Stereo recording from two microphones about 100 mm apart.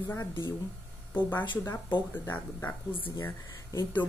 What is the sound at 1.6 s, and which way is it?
Speech, 20° left (ahead or behind).